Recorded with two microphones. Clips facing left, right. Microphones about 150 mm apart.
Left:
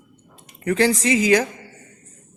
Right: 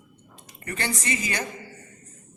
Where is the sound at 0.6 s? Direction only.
90° left.